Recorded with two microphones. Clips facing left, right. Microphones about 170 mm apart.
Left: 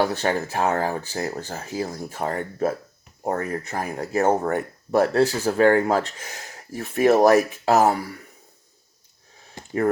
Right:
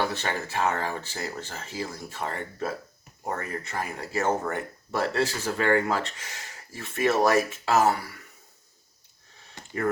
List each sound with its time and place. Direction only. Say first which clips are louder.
0.0 s speech: left 6 dB; 40° left (ahead or behind)
4.5 s speech: left 9 dB; 50° left (ahead or behind)